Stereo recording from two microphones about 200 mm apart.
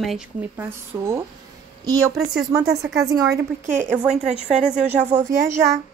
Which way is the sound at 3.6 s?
40° right (ahead or behind).